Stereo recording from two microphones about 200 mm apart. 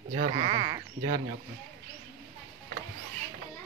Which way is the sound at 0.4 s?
25° right (ahead or behind).